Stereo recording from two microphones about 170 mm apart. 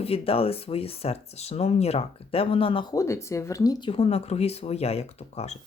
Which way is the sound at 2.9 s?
15° left (ahead or behind).